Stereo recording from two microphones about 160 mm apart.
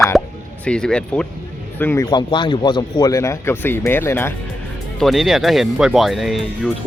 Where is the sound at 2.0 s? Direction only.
30° left (ahead or behind).